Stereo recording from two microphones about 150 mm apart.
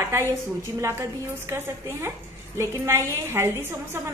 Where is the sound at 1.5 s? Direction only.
15° right (ahead or behind).